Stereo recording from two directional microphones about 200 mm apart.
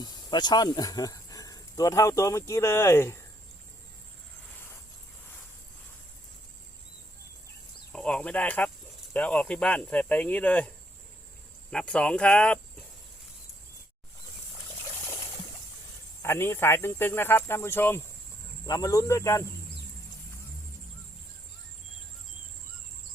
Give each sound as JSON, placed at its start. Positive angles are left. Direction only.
{"t": 0.0, "sound": "speech", "side_deg": 20}
{"t": 7.9, "sound": "cricket", "side_deg": 5}
{"t": 9.1, "sound": "speech", "side_deg": 5}
{"t": 11.7, "sound": "speech", "side_deg": 5}
{"t": 16.2, "sound": "speech", "side_deg": 10}